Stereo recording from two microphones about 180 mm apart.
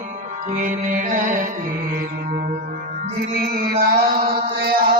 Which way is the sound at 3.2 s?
50° right (ahead or behind).